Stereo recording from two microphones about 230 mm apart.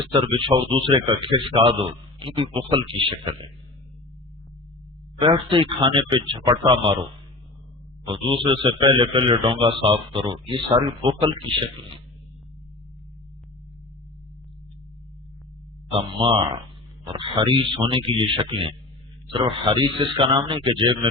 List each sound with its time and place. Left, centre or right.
0.0 s a man's voice: right
5.2 s a man's voice: right
8.0 s a man's voice: right
15.9 s a man's voice: right